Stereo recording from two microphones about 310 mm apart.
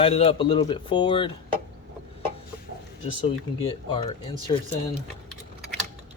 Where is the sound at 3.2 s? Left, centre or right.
Centre.